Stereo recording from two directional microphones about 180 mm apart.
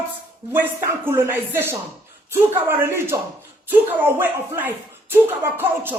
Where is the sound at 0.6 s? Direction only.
15° right (ahead or behind).